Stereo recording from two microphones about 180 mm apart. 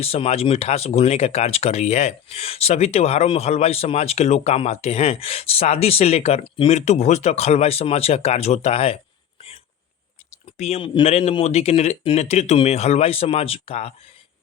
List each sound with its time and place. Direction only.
0.0 s speech: 35° left (ahead or behind)
10.3 s speech: 35° left (ahead or behind)